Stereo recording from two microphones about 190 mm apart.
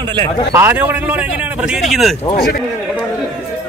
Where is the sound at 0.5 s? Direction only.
10° right (ahead or behind).